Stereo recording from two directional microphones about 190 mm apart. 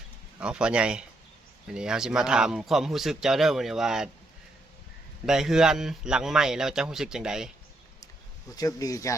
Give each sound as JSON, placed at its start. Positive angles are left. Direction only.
{"t": 0.3, "sound": "speech", "side_deg": -5}
{"t": 5.2, "sound": "speech", "side_deg": -5}
{"t": 8.5, "sound": "speech", "side_deg": 20}